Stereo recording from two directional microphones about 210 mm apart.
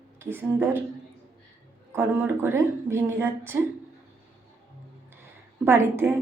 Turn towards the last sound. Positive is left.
turn(degrees=-10)  # may be behind; listen again after turning